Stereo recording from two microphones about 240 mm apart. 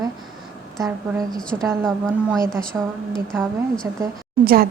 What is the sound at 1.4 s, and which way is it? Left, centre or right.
A woman's voice, centre.